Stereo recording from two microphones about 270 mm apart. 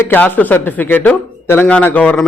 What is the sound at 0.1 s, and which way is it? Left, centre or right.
Speech, centre.